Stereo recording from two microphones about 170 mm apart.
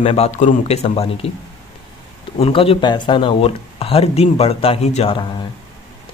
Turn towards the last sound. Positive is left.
turn(degrees=30)  # may be behind; listen again after turning